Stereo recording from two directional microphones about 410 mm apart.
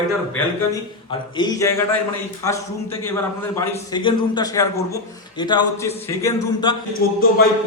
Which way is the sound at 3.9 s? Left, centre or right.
Centre.